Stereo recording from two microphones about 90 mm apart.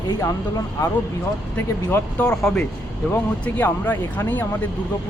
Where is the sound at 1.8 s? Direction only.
15° left (ahead or behind).